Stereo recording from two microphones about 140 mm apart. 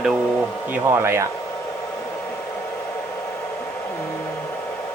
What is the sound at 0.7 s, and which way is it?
Speech, 15° right (ahead or behind).